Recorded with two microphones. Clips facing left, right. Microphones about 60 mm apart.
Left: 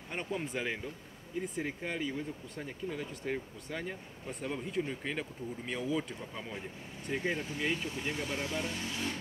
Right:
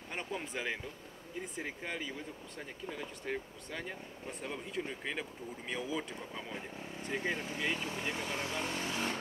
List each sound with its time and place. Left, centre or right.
0.1 s speech: centre
8.0 s speech: right